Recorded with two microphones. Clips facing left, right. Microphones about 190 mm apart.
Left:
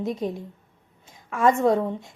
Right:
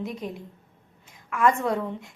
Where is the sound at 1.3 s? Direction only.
25° left (ahead or behind).